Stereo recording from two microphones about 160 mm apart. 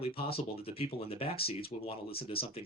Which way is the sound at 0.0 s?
35° left (ahead or behind).